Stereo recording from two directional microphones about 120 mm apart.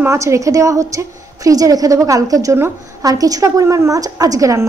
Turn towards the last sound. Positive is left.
turn(degrees=-25)  # may be behind; listen again after turning